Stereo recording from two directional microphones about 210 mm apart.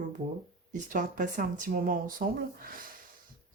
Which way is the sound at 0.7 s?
35° right (ahead or behind).